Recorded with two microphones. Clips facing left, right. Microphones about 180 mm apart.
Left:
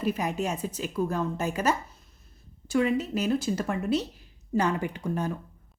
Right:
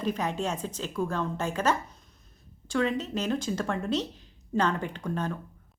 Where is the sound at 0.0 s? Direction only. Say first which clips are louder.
Left 1 dB; 10° left (ahead or behind).